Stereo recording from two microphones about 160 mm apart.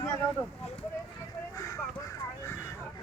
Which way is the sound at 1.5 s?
20° left (ahead or behind).